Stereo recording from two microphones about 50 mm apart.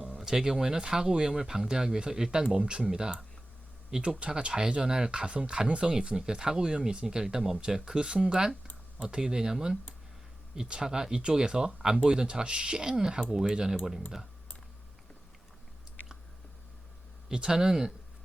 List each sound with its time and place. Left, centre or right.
0.2 s speech: centre
17.2 s speech: centre